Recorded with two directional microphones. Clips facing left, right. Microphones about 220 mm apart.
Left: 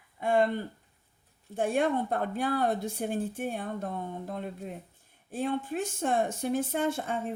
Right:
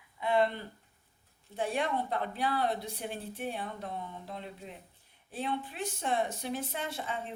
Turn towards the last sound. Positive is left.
turn(degrees=50)  # may be behind; listen again after turning